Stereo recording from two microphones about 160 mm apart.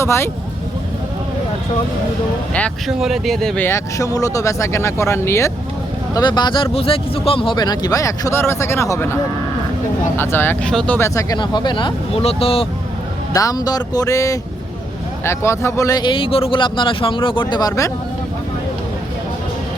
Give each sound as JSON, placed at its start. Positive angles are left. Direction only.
{"t": 0.0, "sound": "speech", "side_deg": 15}
{"t": 2.5, "sound": "speech", "side_deg": 10}
{"t": 3.7, "sound": "speech", "side_deg": 20}
{"t": 6.1, "sound": "speech", "side_deg": 25}
{"t": 10.2, "sound": "speech", "side_deg": 15}
{"t": 13.3, "sound": "speech", "side_deg": 20}